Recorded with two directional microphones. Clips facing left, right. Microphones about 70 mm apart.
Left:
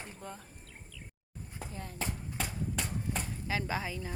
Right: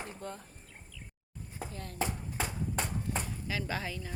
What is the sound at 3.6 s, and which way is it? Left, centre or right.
Speech, centre.